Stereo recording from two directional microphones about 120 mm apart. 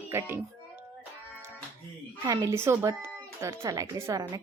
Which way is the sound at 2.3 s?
25° right (ahead or behind).